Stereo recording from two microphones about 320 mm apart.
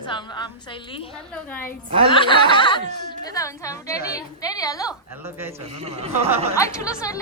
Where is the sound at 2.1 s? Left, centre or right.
Centre.